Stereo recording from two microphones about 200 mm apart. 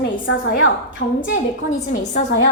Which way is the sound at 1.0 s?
60° left (ahead or behind).